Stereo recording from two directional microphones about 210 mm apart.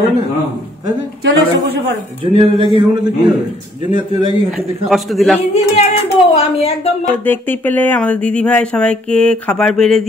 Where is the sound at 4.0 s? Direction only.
20° right (ahead or behind).